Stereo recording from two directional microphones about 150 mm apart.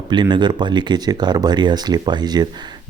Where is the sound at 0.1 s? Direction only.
30° right (ahead or behind).